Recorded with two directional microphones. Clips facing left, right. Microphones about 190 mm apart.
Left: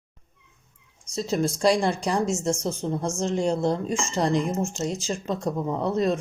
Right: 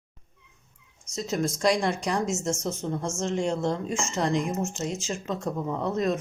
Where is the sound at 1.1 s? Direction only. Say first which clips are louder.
Left 3 dB; 30° left (ahead or behind).